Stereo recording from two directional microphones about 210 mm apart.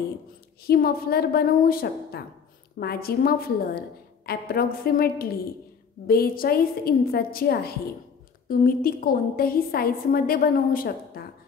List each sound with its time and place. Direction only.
0.7 s a woman's voice: 50° left (ahead or behind)